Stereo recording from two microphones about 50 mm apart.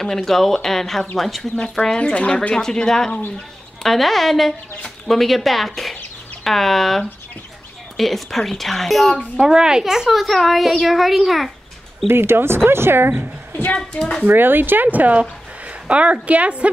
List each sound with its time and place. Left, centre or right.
0.0 s a woman's voice: centre
1.6 s speech: centre
2.1 s speech: left
2.5 s a woman's voice: centre
9.4 s a woman's voice: centre
12.1 s speech: right
13.7 s speech: centre
14.2 s a woman's voice: right